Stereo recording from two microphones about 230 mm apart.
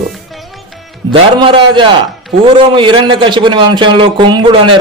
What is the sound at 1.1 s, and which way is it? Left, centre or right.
Speech, right.